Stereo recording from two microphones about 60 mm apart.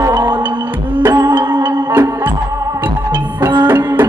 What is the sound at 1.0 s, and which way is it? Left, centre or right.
Music, right.